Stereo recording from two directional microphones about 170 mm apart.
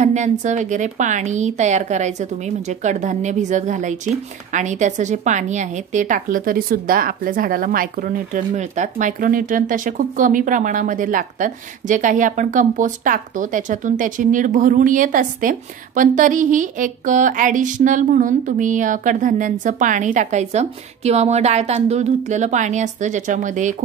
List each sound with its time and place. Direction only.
0.0 s a woman's voice: 45° right (ahead or behind)